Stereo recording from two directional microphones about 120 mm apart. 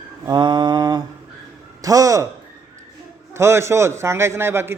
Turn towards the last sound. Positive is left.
turn(degrees=-20)  # may be behind; listen again after turning